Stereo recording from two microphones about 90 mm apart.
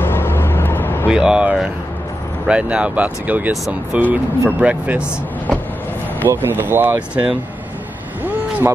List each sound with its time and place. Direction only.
0.0 s vehicle: 25° left (ahead or behind)
1.0 s speech: 10° right (ahead or behind)
6.2 s speech: 25° right (ahead or behind)
8.2 s vehicle: 20° right (ahead or behind)